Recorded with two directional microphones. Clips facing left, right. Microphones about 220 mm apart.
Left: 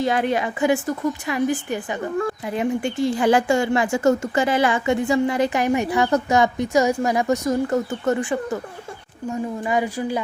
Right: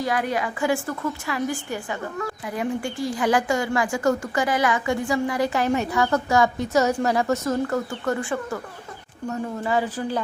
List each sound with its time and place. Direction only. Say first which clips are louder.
0.0 s a woman's voice: left 4 dB; 25° left (ahead or behind)